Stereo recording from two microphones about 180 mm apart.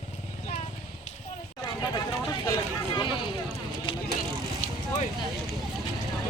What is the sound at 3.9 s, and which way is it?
Vehicle, 30° left (ahead or behind).